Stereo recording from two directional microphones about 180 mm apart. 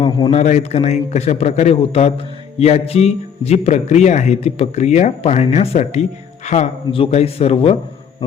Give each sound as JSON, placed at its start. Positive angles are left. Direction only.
{"t": 0.0, "sound": "a man's voice", "side_deg": 30}